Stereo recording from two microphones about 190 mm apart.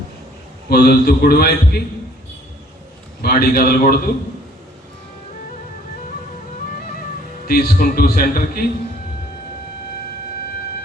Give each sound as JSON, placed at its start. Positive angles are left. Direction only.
{"t": 0.7, "sound": "a man's voice", "side_deg": 50}
{"t": 3.2, "sound": "a man's voice", "side_deg": 50}
{"t": 7.4, "sound": "a man's voice", "side_deg": 50}